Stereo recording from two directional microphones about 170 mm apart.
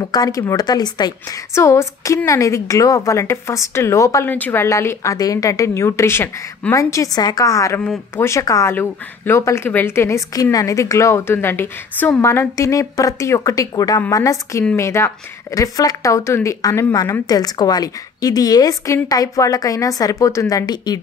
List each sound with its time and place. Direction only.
0.0 s a woman's voice: 20° left (ahead or behind)